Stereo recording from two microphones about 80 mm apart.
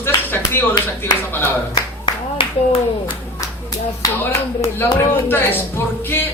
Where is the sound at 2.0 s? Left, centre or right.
Left.